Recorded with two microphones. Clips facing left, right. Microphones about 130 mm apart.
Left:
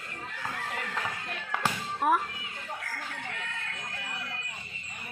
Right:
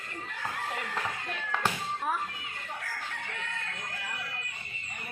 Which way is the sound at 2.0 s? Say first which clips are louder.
Left 8 dB; 65° left (ahead or behind).